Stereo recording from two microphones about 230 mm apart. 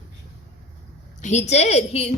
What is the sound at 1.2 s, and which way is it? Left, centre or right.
Speech, left.